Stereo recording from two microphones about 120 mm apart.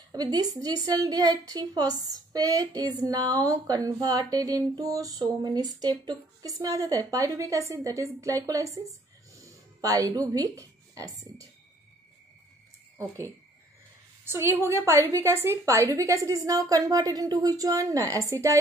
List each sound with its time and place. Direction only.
0.1 s a woman's voice: 35° right (ahead or behind)
14.2 s a woman's voice: 20° right (ahead or behind)